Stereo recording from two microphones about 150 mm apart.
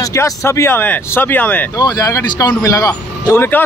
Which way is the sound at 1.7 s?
25° left (ahead or behind).